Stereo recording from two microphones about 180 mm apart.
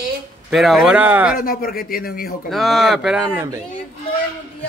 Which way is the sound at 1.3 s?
55° left (ahead or behind).